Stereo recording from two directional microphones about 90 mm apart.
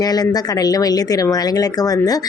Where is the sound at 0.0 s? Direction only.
45° left (ahead or behind).